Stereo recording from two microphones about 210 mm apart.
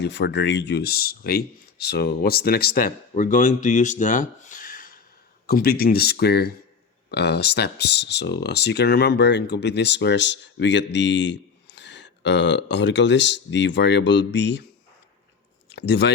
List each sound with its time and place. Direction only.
0.0 s speech: 55° left (ahead or behind)
15.7 s speech: 55° left (ahead or behind)